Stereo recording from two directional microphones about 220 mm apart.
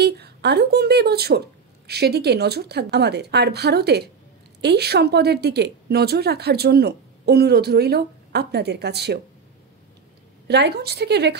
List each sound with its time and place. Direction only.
0.0 s a woman's voice: 50° right (ahead or behind)
10.5 s a woman's voice: 50° right (ahead or behind)